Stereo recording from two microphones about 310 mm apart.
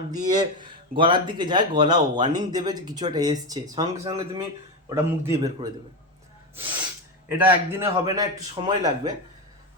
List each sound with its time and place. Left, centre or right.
0.1 s speech: centre
7.3 s speech: centre